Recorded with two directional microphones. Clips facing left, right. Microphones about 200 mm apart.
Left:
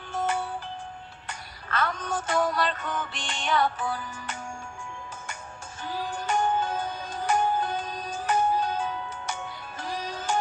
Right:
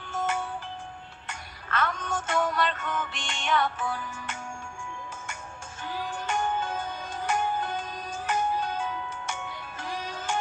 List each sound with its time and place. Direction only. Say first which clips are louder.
0.1 s music: left 2 dB; 35° left (ahead or behind)
5.8 s music: left 2 dB; 35° left (ahead or behind)